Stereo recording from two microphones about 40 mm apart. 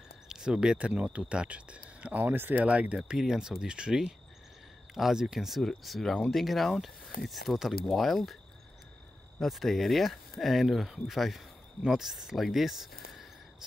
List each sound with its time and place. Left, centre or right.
0.3 s speech: centre
0.7 s speech: right
2.2 s speech: right
2.5 s speech: right
3.1 s speech: centre
5.9 s speech: centre
9.4 s speech: centre